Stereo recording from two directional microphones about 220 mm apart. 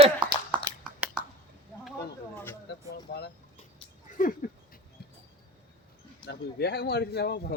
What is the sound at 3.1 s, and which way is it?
Vehicle, 45° left (ahead or behind).